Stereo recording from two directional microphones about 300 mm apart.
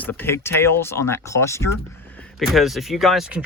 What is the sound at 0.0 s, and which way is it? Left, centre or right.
Speech, centre.